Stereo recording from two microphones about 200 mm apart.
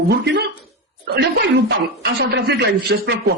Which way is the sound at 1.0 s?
55° right (ahead or behind).